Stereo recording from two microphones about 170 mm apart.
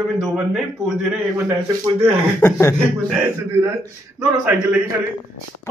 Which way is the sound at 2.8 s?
15° right (ahead or behind).